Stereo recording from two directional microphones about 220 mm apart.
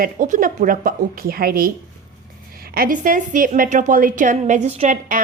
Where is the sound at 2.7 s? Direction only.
40° right (ahead or behind).